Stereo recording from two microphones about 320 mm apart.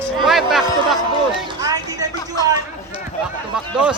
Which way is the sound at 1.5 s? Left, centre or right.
Centre.